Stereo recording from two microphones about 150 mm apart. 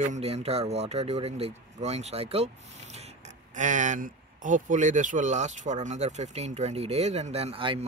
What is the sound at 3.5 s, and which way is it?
Speech, 60° right (ahead or behind).